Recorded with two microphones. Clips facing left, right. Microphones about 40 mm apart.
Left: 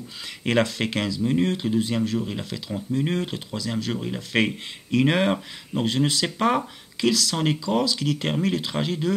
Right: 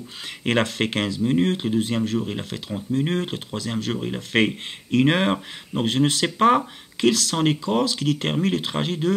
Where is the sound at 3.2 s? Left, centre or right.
Right.